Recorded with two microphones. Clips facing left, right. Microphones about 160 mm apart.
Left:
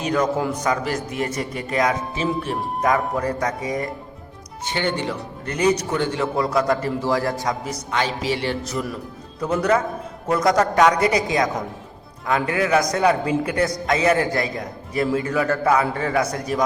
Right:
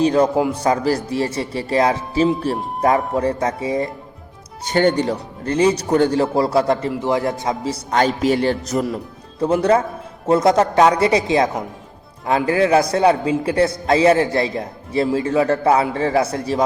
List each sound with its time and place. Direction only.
0.0 s a man's voice: 30° right (ahead or behind)
4.6 s a man's voice: 45° right (ahead or behind); by 7.8 s 25° right (ahead or behind)
7.9 s speech: 45° right (ahead or behind)
9.4 s a man's voice: 30° right (ahead or behind)